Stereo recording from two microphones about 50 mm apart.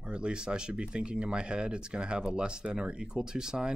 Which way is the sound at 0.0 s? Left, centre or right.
Centre.